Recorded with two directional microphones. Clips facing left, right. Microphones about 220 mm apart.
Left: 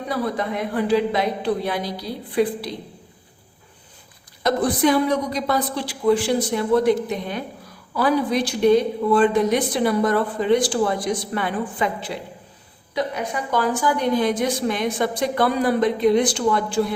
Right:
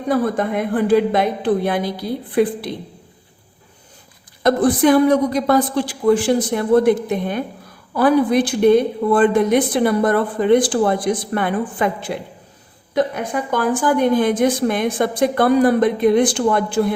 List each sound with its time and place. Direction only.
0.1 s a woman's voice: 50° right (ahead or behind)
4.4 s a woman's voice: 50° right (ahead or behind)